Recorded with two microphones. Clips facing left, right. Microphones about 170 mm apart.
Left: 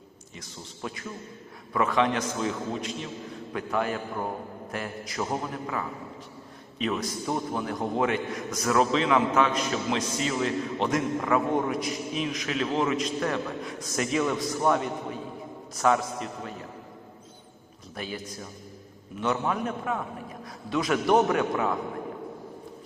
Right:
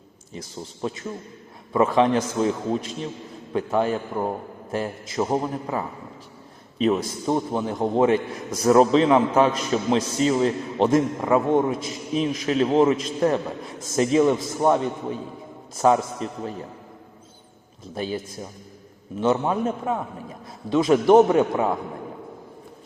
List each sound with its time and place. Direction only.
0.3 s a man's voice: 30° right (ahead or behind)
17.9 s a man's voice: 30° right (ahead or behind)